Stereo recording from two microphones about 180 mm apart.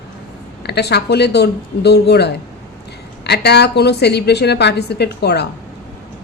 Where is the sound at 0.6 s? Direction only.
65° left (ahead or behind).